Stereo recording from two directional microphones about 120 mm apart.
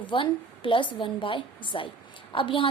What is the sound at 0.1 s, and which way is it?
A woman's voice, 45° left (ahead or behind).